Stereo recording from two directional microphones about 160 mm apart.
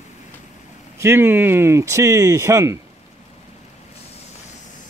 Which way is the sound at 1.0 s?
15° right (ahead or behind).